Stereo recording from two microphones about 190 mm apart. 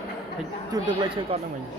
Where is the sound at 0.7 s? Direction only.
25° right (ahead or behind).